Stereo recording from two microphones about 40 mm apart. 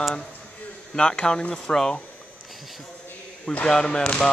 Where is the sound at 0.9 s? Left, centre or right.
Centre.